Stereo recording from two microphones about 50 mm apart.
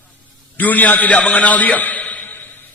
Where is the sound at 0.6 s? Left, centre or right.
Left.